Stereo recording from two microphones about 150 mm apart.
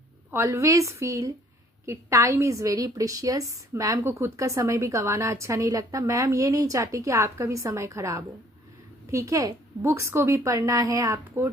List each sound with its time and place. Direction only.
0.3 s a woman's voice: 20° right (ahead or behind)